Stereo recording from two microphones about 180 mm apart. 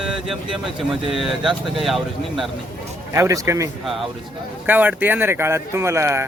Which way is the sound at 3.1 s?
15° right (ahead or behind).